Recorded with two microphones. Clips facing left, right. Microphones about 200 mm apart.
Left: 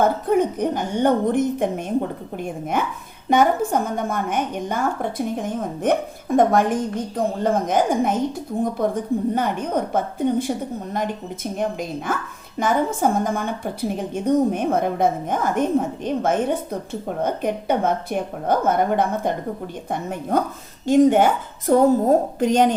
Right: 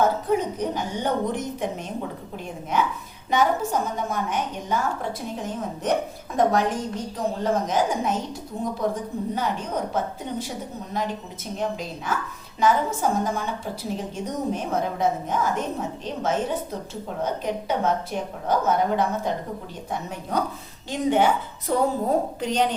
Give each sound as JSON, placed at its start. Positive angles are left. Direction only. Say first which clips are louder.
{"t": 0.0, "sound": "a woman's voice", "louder": "left 4 dB", "side_deg": 55}
{"t": 9.3, "sound": "a woman's voice", "louder": "left 5 dB", "side_deg": 55}